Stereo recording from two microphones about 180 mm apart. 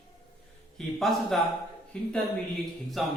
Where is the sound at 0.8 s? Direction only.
Centre (ahead or behind).